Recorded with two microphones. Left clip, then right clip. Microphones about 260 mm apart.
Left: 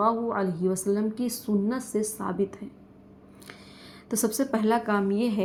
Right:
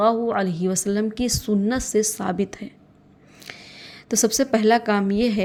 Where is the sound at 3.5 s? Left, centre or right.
Right.